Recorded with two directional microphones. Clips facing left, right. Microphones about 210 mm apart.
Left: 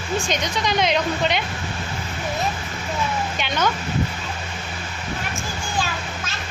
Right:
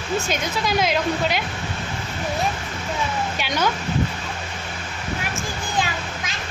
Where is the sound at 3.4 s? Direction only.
10° right (ahead or behind).